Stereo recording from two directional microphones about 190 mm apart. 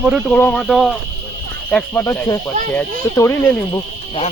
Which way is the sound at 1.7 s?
10° left (ahead or behind).